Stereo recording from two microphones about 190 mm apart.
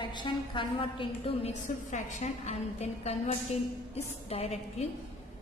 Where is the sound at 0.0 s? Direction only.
25° left (ahead or behind).